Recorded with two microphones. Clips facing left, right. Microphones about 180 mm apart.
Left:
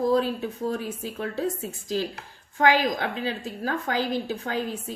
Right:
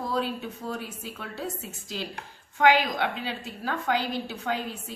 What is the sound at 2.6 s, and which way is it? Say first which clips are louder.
A woman's voice: even; 40° left (ahead or behind).